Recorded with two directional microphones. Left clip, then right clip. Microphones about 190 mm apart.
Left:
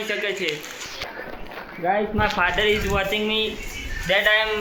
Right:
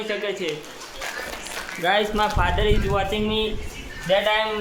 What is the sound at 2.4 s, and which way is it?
Speech, 5° right (ahead or behind).